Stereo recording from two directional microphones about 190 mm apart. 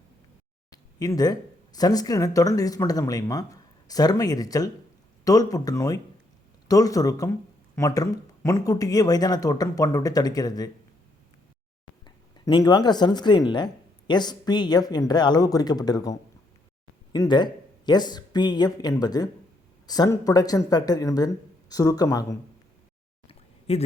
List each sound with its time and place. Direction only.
0.7 s speech: 20° left (ahead or behind)
12.0 s speech: 25° left (ahead or behind)
23.2 s a sound: 30° left (ahead or behind)